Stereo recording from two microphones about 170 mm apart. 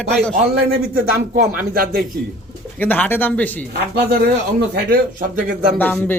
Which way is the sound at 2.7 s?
10° left (ahead or behind).